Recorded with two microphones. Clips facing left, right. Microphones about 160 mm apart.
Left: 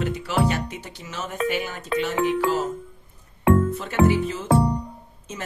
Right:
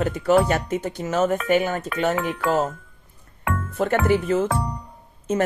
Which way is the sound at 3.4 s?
30° left (ahead or behind).